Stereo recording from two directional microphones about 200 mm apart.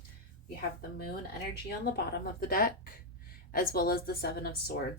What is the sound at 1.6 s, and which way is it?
Speech, 50° left (ahead or behind).